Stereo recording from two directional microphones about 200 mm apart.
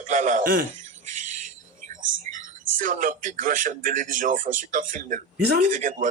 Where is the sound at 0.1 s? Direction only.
40° right (ahead or behind).